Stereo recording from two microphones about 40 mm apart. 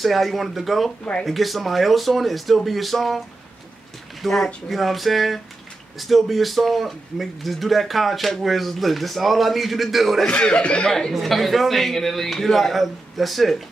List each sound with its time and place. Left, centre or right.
0.0 s speech: centre
4.2 s speech: centre
10.3 s speech: left
10.9 s speech: centre
11.1 s speech: centre